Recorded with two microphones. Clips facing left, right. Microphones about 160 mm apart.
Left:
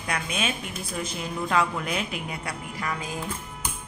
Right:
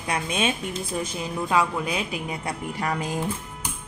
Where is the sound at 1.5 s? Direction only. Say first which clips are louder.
Right 2 dB; 15° right (ahead or behind).